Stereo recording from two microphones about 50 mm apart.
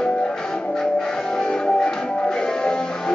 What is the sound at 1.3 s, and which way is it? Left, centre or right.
Music, centre.